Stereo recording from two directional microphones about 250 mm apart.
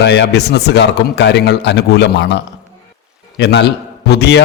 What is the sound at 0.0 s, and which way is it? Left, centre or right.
A man's voice, left.